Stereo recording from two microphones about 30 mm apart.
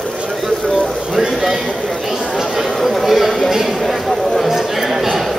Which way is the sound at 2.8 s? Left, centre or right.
Centre.